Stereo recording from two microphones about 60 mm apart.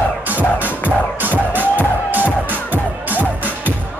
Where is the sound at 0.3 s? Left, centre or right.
Right.